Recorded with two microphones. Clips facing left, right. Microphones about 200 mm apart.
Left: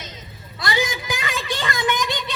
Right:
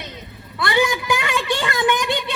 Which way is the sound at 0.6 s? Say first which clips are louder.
Right 5 dB; 65° right (ahead or behind).